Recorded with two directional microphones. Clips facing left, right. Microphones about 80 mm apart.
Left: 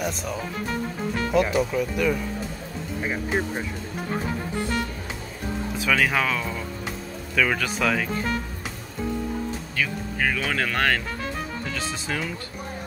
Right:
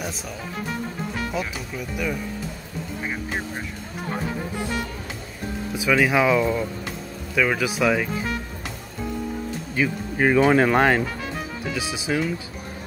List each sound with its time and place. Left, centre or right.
0.0 s music: centre
1.7 s speech: centre
5.8 s speech: centre
9.8 s speech: right
11.6 s speech: centre